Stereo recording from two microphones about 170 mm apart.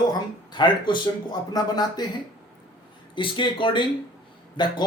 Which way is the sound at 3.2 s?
30° left (ahead or behind).